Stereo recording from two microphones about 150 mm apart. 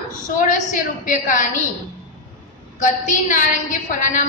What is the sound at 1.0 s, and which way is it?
Speech, 60° left (ahead or behind).